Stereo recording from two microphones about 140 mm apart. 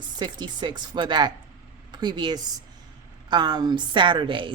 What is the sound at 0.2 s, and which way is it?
A woman's voice, 30° right (ahead or behind).